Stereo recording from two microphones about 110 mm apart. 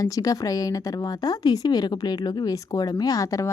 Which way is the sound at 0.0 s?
35° left (ahead or behind).